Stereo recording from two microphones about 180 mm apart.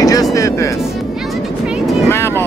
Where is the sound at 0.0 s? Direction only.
20° left (ahead or behind).